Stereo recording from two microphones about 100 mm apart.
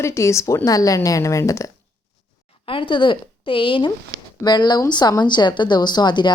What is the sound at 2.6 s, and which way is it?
A woman's voice, 55° left (ahead or behind).